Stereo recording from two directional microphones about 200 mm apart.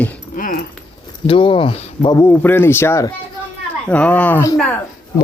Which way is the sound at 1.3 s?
25° left (ahead or behind).